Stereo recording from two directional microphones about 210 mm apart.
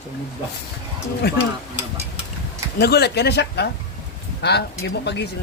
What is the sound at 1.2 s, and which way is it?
Speech, 50° left (ahead or behind).